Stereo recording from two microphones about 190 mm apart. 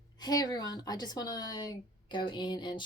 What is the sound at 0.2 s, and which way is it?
A woman's voice, 20° left (ahead or behind).